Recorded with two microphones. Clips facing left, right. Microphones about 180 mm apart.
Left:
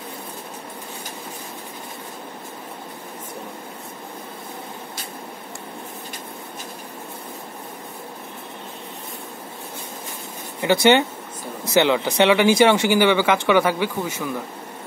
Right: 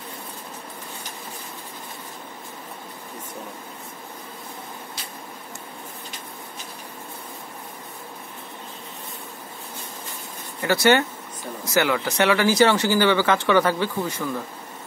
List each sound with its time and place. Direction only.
10.6 s speech: 20° left (ahead or behind)